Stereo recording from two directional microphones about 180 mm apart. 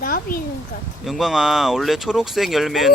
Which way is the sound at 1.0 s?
Centre (ahead or behind).